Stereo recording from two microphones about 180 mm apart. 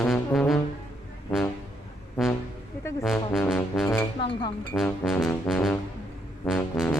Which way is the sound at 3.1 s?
Centre (ahead or behind).